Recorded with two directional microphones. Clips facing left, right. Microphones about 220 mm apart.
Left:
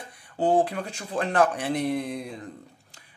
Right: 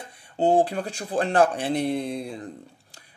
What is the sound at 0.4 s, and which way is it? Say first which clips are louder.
Speech: right 2 dB; 25° right (ahead or behind).